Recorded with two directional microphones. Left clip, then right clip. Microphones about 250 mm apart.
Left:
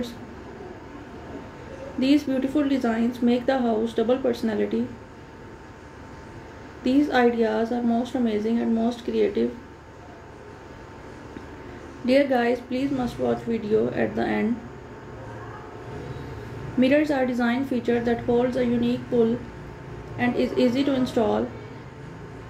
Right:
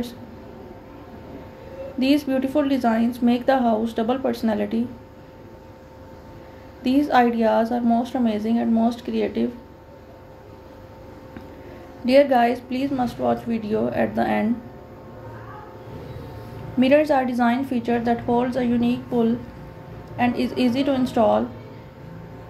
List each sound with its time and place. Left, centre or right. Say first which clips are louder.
2.0 s speech: right 1 dB; right
6.8 s speech: right 2 dB; right
12.1 s speech: right 4 dB; right
16.8 s speech: right 4 dB; right